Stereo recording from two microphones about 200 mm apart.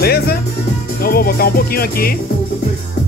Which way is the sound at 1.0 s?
50° left (ahead or behind).